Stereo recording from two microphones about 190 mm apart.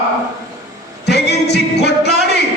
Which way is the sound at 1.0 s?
60° left (ahead or behind).